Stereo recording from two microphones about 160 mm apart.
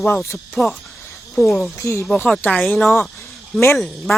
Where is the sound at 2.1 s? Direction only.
5° left (ahead or behind).